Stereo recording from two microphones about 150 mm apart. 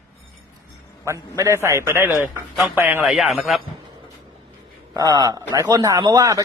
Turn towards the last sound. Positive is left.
turn(degrees=-25)  # may be behind; listen again after turning